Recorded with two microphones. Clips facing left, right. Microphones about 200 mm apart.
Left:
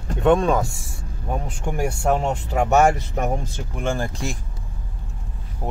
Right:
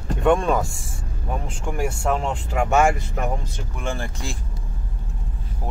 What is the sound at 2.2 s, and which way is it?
Speech, 40° left (ahead or behind).